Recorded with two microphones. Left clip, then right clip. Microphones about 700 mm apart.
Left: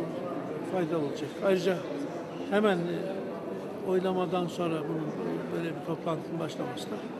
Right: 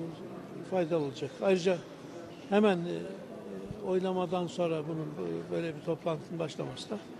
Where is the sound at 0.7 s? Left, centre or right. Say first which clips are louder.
Right 1 dB; right.